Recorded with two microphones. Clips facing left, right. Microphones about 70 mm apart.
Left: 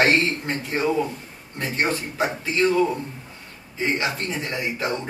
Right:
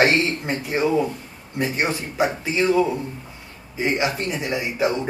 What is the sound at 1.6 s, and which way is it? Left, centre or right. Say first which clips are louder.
Speech: right 1 dB; centre.